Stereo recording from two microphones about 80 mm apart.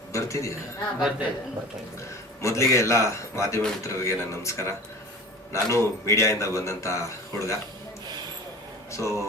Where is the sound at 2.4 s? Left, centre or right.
Left.